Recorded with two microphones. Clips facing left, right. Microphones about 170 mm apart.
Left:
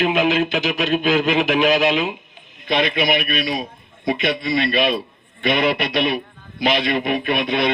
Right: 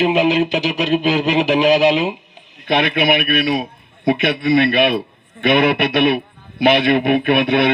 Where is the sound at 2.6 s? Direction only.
60° right (ahead or behind).